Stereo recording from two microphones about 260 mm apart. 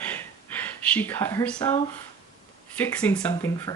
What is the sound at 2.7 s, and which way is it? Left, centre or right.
Speech, centre.